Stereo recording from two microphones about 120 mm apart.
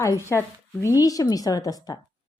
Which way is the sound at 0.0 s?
25° left (ahead or behind).